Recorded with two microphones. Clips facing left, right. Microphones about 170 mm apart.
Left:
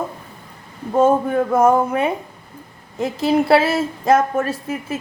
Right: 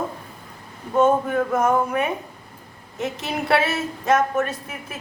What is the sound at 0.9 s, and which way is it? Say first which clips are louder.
A woman's voice: left 3 dB; 30° left (ahead or behind).